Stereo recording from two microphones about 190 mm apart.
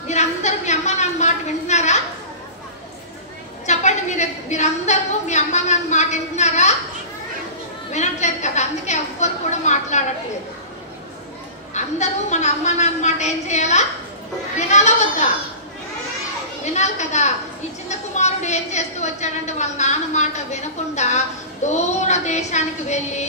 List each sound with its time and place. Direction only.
0.1 s a sound: 35° left (ahead or behind)
3.6 s a woman's voice: 40° left (ahead or behind)
7.9 s a woman's voice: 40° left (ahead or behind)
11.7 s a woman's voice: 40° left (ahead or behind)
16.7 s a woman's voice: 40° left (ahead or behind)